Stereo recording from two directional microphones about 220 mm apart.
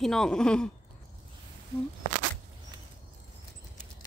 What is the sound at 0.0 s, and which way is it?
Speech, centre (ahead or behind).